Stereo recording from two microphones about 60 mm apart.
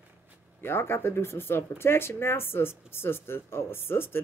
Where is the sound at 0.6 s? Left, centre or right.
Left.